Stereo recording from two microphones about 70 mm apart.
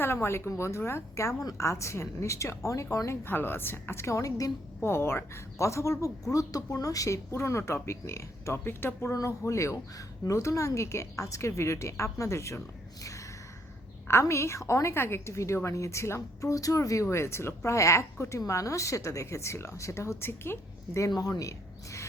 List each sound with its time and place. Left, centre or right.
0.0 s a woman's voice: left
3.2 s speech: left
4.8 s a woman's voice: left
9.1 s a woman's voice: left
21.2 s speech: left